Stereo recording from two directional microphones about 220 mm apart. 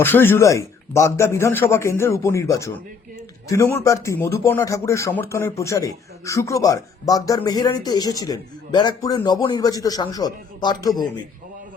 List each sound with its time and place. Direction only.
0.0 s speech: 10° left (ahead or behind)